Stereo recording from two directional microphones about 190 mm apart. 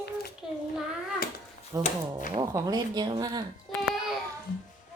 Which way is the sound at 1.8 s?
40° left (ahead or behind).